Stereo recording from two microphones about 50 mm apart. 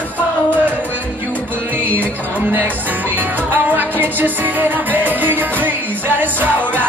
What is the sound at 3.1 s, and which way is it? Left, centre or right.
Music, right.